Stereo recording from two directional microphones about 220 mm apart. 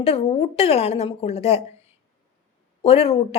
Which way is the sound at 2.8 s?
25° left (ahead or behind).